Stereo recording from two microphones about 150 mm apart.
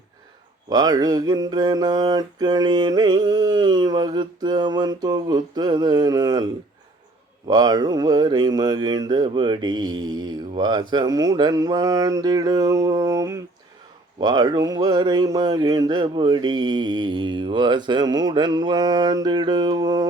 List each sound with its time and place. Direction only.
0.7 s mantra: 25° right (ahead or behind)